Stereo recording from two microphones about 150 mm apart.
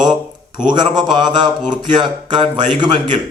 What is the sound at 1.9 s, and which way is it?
Speech, 30° right (ahead or behind).